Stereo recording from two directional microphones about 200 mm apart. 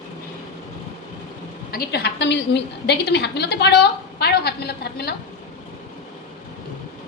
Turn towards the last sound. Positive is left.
turn(degrees=55)  # may be behind; listen again after turning